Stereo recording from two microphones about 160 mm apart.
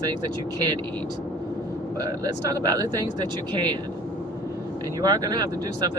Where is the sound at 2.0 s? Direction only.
20° right (ahead or behind).